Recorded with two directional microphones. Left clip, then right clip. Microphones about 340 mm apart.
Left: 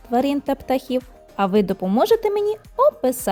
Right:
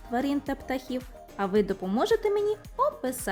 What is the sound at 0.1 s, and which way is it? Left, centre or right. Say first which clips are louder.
Speech: left 9 dB; centre.